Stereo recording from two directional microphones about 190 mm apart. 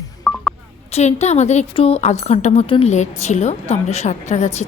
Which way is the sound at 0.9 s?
35° left (ahead or behind).